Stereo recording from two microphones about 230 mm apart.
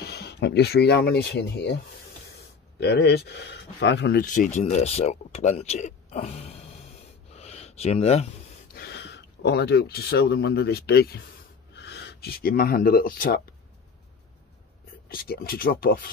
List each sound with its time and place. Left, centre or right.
0.0 s speech: left
2.8 s speech: left
7.3 s a sound: left
8.7 s speech: left
15.0 s speech: left